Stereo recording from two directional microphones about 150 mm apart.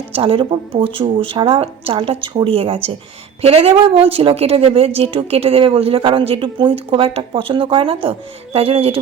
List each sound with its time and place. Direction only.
0.1 s a woman's voice: 35° right (ahead or behind)